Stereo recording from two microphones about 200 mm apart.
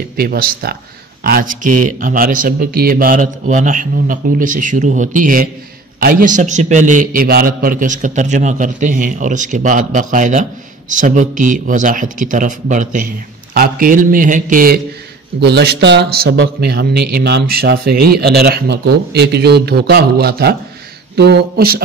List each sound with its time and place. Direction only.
0.2 s a man's voice: 50° right (ahead or behind)
15.4 s a man's voice: 55° right (ahead or behind)